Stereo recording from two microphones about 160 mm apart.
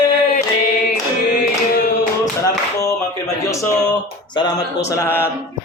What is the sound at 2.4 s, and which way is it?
Clapping, 20° left (ahead or behind).